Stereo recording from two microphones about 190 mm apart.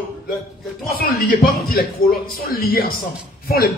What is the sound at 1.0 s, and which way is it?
A man's voice, 50° left (ahead or behind).